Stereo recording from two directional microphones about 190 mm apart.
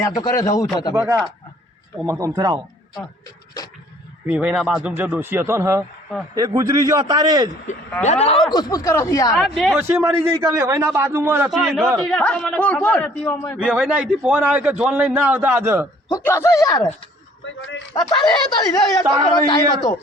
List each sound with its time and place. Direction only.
0.0 s a man's voice: 15° left (ahead or behind)
2.0 s a man's voice: 15° right (ahead or behind)
4.3 s a man's voice: 10° right (ahead or behind)
8.0 s speech: 35° left (ahead or behind)
8.5 s a man's voice: 20° left (ahead or behind)
9.4 s speech: centre (ahead or behind)
9.8 s a man's voice: 10° right (ahead or behind)
11.5 s a man's voice: centre (ahead or behind)
13.6 s a man's voice: 5° right (ahead or behind)
16.0 s a man's voice: 15° left (ahead or behind)
17.9 s speech: 20° left (ahead or behind)